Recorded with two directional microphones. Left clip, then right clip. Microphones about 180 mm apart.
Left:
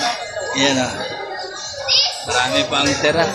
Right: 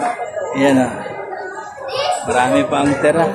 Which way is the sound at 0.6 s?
10° right (ahead or behind).